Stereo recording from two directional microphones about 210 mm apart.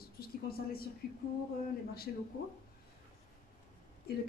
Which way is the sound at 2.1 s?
45° left (ahead or behind).